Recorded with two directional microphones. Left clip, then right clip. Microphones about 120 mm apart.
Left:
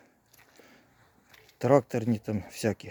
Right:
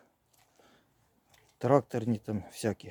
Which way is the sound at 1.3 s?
15° left (ahead or behind).